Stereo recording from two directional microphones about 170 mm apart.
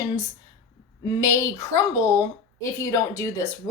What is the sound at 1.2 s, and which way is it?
A woman's voice, 20° left (ahead or behind).